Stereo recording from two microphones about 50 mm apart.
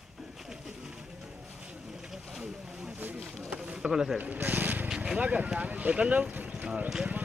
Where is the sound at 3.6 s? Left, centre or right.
Centre.